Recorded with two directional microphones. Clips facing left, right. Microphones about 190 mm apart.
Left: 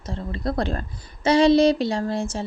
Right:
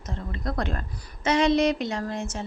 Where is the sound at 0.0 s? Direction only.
30° left (ahead or behind).